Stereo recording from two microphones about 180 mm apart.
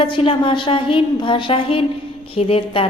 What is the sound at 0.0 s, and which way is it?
A woman's voice, 30° left (ahead or behind).